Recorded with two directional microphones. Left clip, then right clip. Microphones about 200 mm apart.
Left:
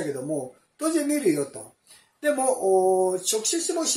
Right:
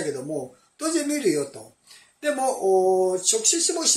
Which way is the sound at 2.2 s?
15° left (ahead or behind).